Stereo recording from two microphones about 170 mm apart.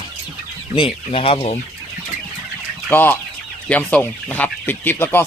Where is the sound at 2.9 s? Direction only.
15° left (ahead or behind).